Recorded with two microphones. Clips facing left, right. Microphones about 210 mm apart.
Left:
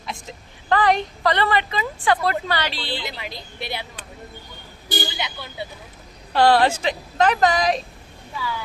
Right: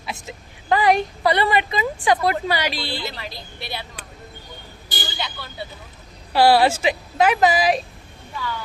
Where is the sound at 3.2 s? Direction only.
20° left (ahead or behind).